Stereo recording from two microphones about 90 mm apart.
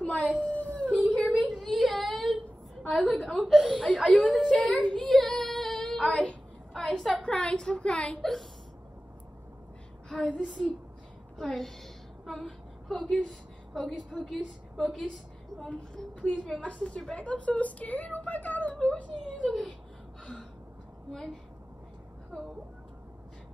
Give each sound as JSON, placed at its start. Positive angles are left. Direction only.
{"t": 0.0, "sound": "a sound", "side_deg": 15}
{"t": 1.5, "sound": "whimper", "side_deg": 0}
{"t": 2.9, "sound": "a woman's voice", "side_deg": 5}
{"t": 3.5, "sound": "speech", "side_deg": -10}
{"t": 3.8, "sound": "a woman's voice", "side_deg": 10}
{"t": 4.4, "sound": "child singing", "side_deg": 10}
{"t": 7.2, "sound": "a woman's voice", "side_deg": 10}
{"t": 10.0, "sound": "speech", "side_deg": 0}
{"t": 11.3, "sound": "a woman's voice", "side_deg": 0}
{"t": 12.3, "sound": "a sound", "side_deg": 0}
{"t": 13.1, "sound": "a woman's voice", "side_deg": 5}